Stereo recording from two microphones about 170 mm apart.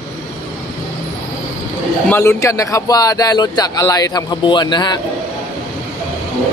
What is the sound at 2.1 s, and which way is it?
Speech, 15° left (ahead or behind).